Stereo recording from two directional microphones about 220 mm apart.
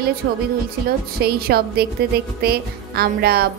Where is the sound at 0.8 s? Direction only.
45° right (ahead or behind).